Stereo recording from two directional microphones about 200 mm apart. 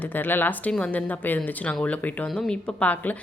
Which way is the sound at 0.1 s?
10° left (ahead or behind).